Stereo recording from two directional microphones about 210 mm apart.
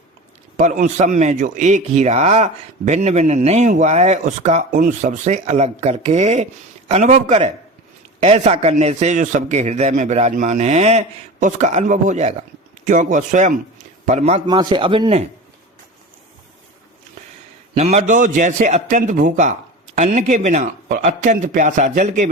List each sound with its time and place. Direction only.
0.5 s a man's voice: 35° right (ahead or behind)
14.4 s a man's voice: 20° right (ahead or behind)
17.7 s speech: 30° right (ahead or behind)